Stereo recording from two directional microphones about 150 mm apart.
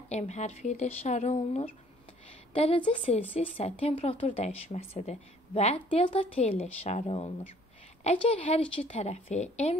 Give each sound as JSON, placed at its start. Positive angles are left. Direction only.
{"t": 0.1, "sound": "a woman's voice", "side_deg": 50}
{"t": 2.5, "sound": "a woman's voice", "side_deg": 40}